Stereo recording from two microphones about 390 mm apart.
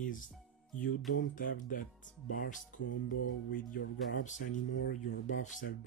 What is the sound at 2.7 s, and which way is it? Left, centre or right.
Speech, left.